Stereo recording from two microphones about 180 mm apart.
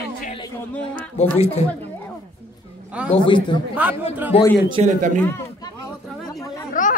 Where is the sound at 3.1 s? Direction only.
25° left (ahead or behind).